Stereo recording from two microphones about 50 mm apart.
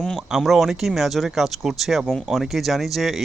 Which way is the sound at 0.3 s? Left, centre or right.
Centre.